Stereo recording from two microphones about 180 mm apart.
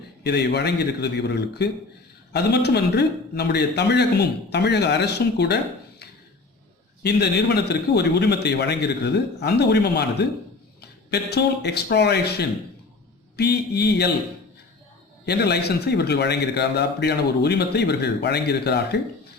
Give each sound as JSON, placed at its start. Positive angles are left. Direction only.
{"t": 0.2, "sound": "a man's voice", "side_deg": 65}
{"t": 7.0, "sound": "a man's voice", "side_deg": 65}
{"t": 15.3, "sound": "a man's voice", "side_deg": 65}